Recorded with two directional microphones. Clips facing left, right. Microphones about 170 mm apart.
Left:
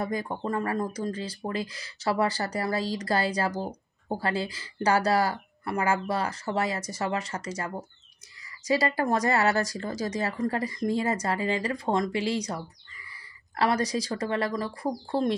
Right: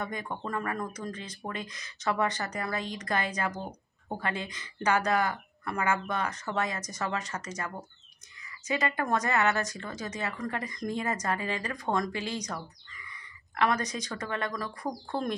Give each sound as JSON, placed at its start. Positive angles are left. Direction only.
{"t": 0.0, "sound": "speech", "side_deg": 35}